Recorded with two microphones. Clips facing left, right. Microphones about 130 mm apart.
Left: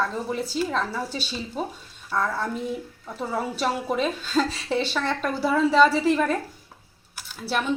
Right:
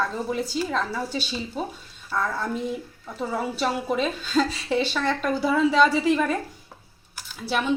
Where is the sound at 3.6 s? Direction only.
Centre (ahead or behind).